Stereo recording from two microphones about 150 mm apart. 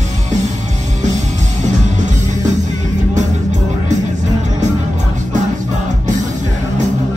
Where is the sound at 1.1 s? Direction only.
50° right (ahead or behind).